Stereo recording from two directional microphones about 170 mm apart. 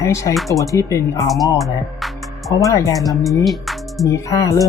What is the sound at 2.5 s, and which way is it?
Speech, 20° left (ahead or behind).